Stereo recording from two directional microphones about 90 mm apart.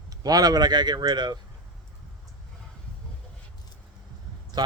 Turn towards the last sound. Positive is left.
turn(degrees=-50)  # may be behind; listen again after turning